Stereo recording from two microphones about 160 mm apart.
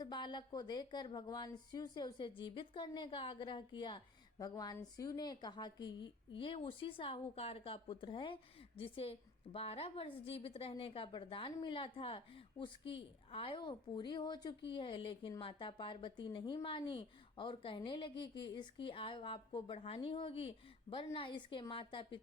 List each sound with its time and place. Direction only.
0.0 s a woman's voice: 25° left (ahead or behind)